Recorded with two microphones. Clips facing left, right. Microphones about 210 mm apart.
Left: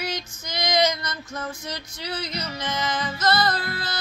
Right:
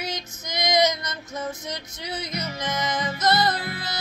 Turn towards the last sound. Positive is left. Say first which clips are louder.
# left 1 dB
turn(degrees=-20)  # may be behind; listen again after turning